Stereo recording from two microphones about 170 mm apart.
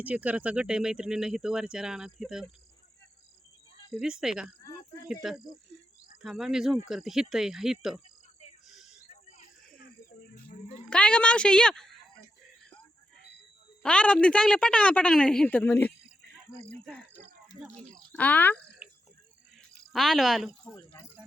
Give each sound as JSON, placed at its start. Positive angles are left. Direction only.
{"t": 0.0, "sound": "speech", "side_deg": -10}
{"t": 3.9, "sound": "speech", "side_deg": -5}
{"t": 8.6, "sound": "a sound", "side_deg": 0}
{"t": 9.2, "sound": "a sound", "side_deg": 55}
{"t": 10.8, "sound": "speech", "side_deg": 5}
{"t": 13.8, "sound": "a woman's voice", "side_deg": 5}
{"t": 17.9, "sound": "speech", "side_deg": 10}
{"t": 19.9, "sound": "speech", "side_deg": 0}